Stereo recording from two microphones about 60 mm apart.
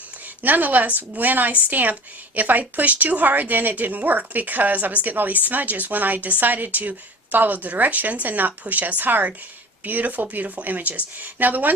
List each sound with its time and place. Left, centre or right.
0.4 s a woman's voice: right